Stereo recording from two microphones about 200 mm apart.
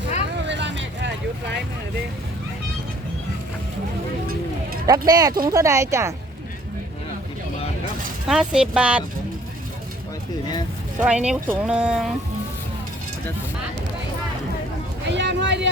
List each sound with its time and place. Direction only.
0.4 s vehicle: 60° right (ahead or behind)
4.9 s speech: 20° right (ahead or behind)
8.3 s speech: centre (ahead or behind)
11.0 s speech: 5° right (ahead or behind)
15.1 s vehicle: 60° right (ahead or behind)